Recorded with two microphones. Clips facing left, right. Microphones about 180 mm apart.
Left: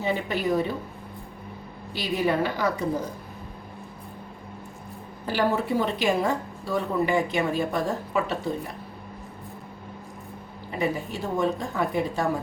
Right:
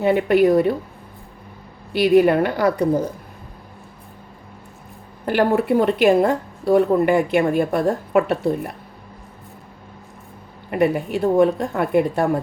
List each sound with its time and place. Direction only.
0.0 s speech: 60° right (ahead or behind)
1.9 s speech: 65° right (ahead or behind)
5.2 s speech: 60° right (ahead or behind)
10.7 s speech: 65° right (ahead or behind)